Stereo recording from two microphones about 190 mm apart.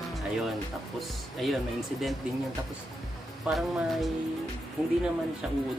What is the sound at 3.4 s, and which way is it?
Speech, centre (ahead or behind).